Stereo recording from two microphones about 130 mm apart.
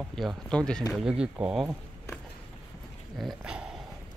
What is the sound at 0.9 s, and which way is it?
Speech, 5° right (ahead or behind).